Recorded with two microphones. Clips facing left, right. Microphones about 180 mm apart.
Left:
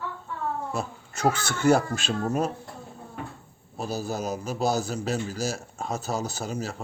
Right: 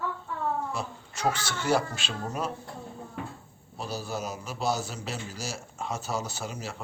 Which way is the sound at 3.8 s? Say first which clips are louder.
Left 4 dB; 45° left (ahead or behind).